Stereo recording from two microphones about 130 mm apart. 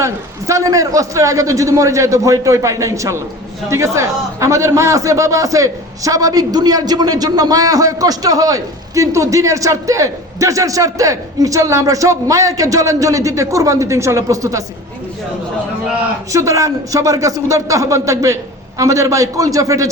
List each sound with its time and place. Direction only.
0.0 s a man's voice: 25° right (ahead or behind)
16.3 s a man's voice: 25° right (ahead or behind)